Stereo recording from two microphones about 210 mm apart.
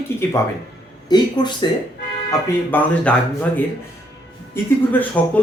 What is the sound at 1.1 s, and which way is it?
Speech, 20° left (ahead or behind).